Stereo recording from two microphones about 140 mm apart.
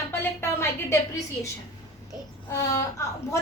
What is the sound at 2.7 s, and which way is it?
Speech, 20° left (ahead or behind).